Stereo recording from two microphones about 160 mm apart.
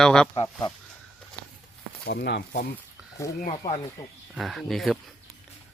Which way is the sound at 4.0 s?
20° left (ahead or behind).